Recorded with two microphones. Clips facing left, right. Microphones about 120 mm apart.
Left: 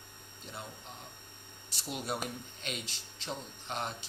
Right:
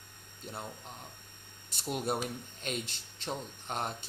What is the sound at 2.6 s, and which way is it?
Speech, 50° right (ahead or behind).